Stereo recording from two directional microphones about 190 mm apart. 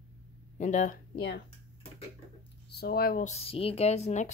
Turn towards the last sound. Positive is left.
turn(degrees=35)  # may be behind; listen again after turning